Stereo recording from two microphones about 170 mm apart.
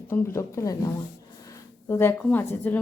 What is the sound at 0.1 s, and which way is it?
Speech, 15° left (ahead or behind).